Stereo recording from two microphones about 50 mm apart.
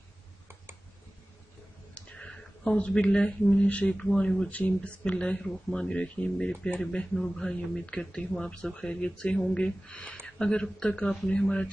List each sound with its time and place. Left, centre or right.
2.0 s a sound: left
3.4 s speech: left
10.2 s speech: centre